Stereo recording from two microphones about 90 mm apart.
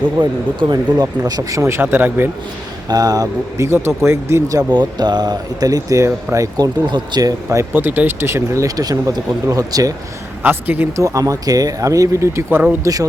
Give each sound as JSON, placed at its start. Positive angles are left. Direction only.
{"t": 0.2, "sound": "speech", "side_deg": -50}
{"t": 1.3, "sound": "speech", "side_deg": -40}
{"t": 1.6, "sound": "speech", "side_deg": -25}
{"t": 2.9, "sound": "speech", "side_deg": -40}
{"t": 4.7, "sound": "speech", "side_deg": -55}
{"t": 6.9, "sound": "speech", "side_deg": -50}
{"t": 7.6, "sound": "speech", "side_deg": -25}
{"t": 10.4, "sound": "speech", "side_deg": -20}
{"t": 10.9, "sound": "speech", "side_deg": -35}
{"t": 12.8, "sound": "speech", "side_deg": -40}